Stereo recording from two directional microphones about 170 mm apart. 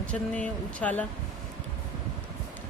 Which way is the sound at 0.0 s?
5° left (ahead or behind).